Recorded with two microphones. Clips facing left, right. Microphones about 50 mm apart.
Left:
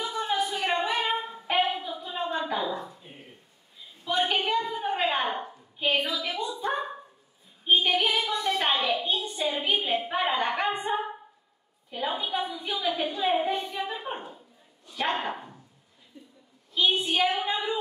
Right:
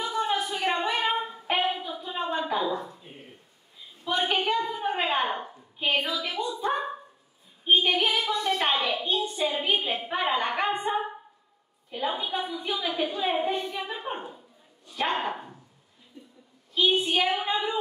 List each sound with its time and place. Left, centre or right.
0.0 s singing: centre
2.3 s a sound: centre
4.1 s a woman's voice: centre
7.7 s a woman's voice: centre
16.7 s a woman's voice: centre